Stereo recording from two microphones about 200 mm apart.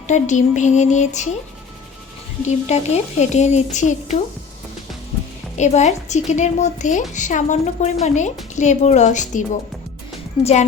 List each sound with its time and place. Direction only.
0.1 s speech: 35° left (ahead or behind)
2.6 s speech: 35° left (ahead or behind)
5.5 s speech: 35° left (ahead or behind)
10.4 s speech: 35° left (ahead or behind)